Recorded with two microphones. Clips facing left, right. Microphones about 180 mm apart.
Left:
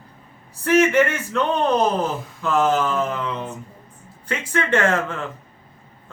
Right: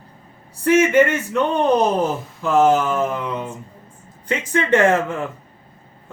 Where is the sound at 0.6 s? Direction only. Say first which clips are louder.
Right 2 dB; 15° right (ahead or behind).